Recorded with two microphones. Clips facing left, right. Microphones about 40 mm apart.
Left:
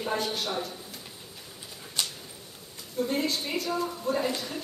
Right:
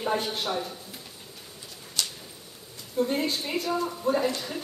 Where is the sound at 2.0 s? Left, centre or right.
Left.